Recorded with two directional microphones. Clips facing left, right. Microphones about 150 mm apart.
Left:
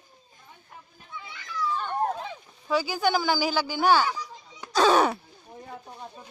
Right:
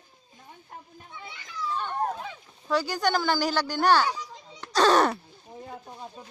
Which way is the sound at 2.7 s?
5° left (ahead or behind).